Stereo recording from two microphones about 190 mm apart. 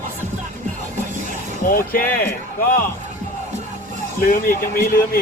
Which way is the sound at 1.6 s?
50° left (ahead or behind).